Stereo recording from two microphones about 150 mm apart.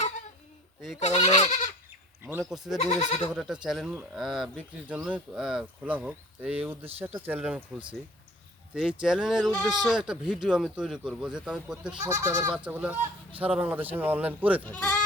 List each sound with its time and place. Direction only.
0.9 s speech: 45° left (ahead or behind)
2.4 s speech: centre (ahead or behind)
2.8 s speech: 45° left (ahead or behind)
3.3 s speech: 5° right (ahead or behind)
8.7 s speech: 5° right (ahead or behind)
12.0 s speech: 20° right (ahead or behind)
12.5 s speech: 10° right (ahead or behind)
14.6 s speech: 10° left (ahead or behind)